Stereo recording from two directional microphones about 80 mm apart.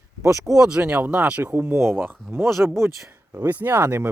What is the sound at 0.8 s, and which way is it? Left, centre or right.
Speech, right.